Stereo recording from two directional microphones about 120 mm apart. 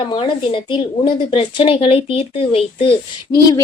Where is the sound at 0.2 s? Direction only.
45° left (ahead or behind).